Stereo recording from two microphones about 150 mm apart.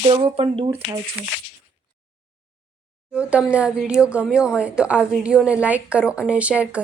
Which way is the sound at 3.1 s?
10° right (ahead or behind).